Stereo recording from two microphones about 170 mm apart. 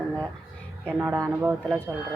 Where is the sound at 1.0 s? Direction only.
15° right (ahead or behind).